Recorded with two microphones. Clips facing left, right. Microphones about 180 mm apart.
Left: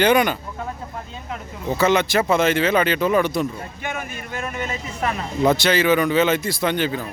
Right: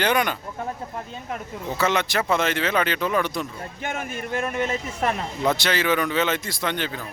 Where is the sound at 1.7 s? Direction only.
Centre (ahead or behind).